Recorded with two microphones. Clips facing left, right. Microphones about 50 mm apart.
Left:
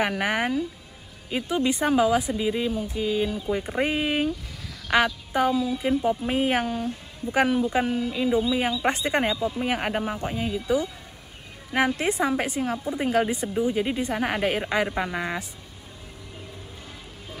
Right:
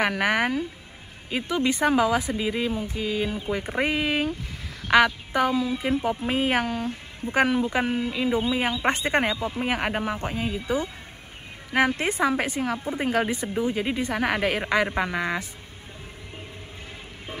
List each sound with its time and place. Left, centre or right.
0.2 s speech: right
2.4 s speech: centre
2.7 s speech: right